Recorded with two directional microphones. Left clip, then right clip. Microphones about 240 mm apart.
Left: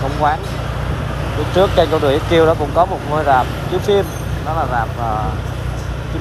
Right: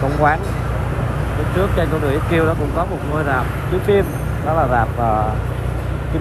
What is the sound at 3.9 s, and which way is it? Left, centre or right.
Speech, left.